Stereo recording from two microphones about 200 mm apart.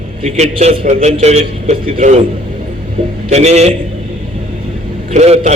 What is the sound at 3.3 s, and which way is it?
Speech, 35° right (ahead or behind).